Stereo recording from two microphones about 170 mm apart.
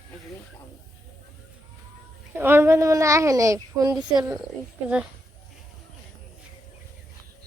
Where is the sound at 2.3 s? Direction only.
15° right (ahead or behind).